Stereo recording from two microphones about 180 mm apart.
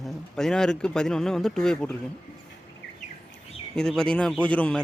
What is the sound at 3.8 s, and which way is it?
Speech, 5° left (ahead or behind).